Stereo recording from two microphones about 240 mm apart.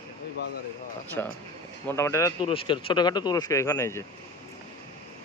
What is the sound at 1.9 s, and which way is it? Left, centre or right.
Speech, centre.